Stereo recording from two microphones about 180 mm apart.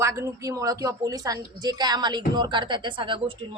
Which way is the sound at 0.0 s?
15° right (ahead or behind).